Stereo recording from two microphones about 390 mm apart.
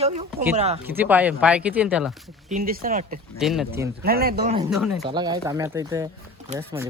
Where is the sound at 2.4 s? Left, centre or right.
Centre.